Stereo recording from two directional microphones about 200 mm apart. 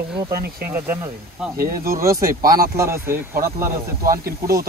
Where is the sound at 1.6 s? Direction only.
45° right (ahead or behind).